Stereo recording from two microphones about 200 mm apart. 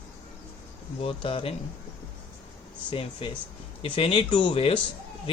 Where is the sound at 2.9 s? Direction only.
25° left (ahead or behind).